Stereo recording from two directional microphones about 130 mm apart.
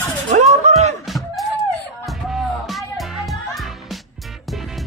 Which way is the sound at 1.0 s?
Centre (ahead or behind).